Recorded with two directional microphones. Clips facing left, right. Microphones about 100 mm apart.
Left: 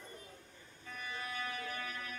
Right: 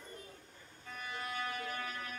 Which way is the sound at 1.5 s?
35° right (ahead or behind).